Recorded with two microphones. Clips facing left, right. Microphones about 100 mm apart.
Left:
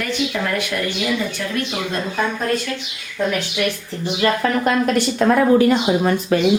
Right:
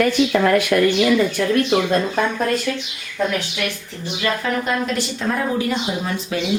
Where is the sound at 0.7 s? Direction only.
65° right (ahead or behind).